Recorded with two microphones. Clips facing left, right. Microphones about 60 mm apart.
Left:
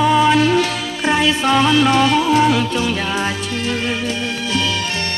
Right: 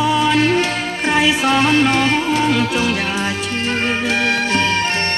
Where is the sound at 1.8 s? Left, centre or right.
Right.